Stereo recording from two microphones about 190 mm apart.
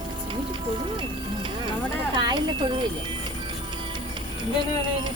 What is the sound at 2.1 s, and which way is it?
Speech, 25° right (ahead or behind).